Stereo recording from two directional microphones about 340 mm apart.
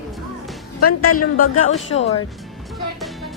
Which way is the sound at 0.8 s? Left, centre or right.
Left.